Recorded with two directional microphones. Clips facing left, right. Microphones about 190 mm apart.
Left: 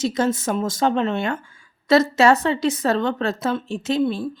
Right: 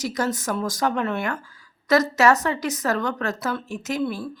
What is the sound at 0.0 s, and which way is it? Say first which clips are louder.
Speech: left 4 dB; 25° left (ahead or behind).